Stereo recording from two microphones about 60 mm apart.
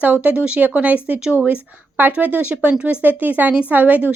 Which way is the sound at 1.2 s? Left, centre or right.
Centre.